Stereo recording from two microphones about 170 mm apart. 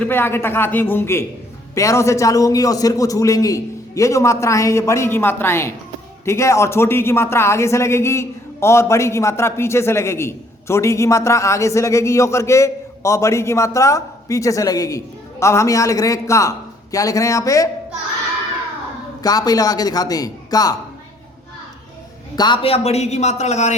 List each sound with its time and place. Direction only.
0.0 s a man's voice: 15° left (ahead or behind)
19.2 s a man's voice: 20° left (ahead or behind)
22.4 s speech: 30° left (ahead or behind)